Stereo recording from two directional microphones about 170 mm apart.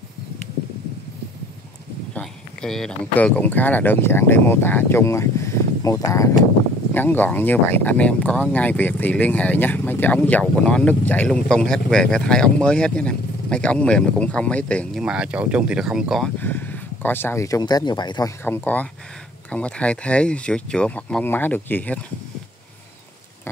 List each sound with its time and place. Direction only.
2.1 s speech: 5° left (ahead or behind)
15.0 s speech: 5° right (ahead or behind)
16.3 s speech: 10° left (ahead or behind)
18.4 s speech: 10° left (ahead or behind)